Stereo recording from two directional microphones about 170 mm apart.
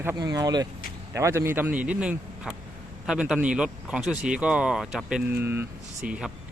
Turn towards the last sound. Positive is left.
turn(degrees=-5)  # may be behind; listen again after turning